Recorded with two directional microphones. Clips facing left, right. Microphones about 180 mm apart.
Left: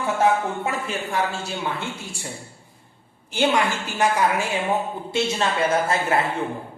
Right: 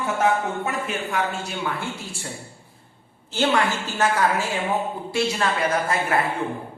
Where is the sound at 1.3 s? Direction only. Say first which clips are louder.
Even; 25° left (ahead or behind).